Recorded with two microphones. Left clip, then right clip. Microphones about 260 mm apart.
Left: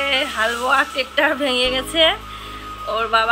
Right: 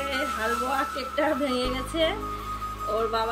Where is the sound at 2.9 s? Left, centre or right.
Centre.